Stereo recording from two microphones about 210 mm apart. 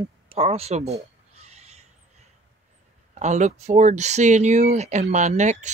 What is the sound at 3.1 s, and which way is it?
Speech, 35° right (ahead or behind).